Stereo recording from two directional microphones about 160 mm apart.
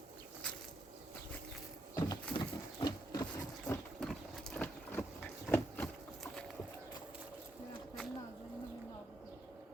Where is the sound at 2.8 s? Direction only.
25° left (ahead or behind).